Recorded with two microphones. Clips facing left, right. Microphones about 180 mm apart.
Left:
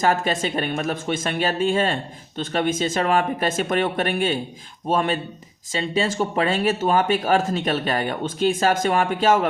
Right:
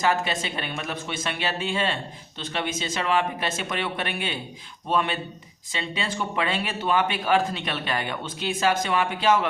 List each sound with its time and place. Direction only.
0.0 s a woman's voice: 45° left (ahead or behind)